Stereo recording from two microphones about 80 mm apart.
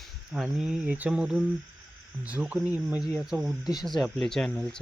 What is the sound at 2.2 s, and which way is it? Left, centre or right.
Speech, centre.